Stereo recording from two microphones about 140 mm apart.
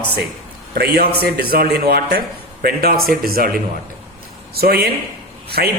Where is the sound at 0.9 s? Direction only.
90° right.